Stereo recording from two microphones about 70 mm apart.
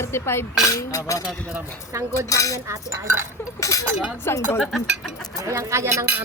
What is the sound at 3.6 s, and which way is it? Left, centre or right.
Speech, left.